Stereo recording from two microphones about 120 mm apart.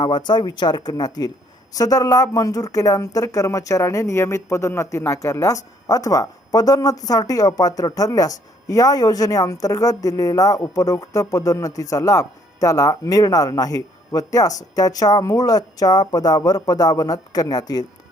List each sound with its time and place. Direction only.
0.0 s speech: 40° left (ahead or behind)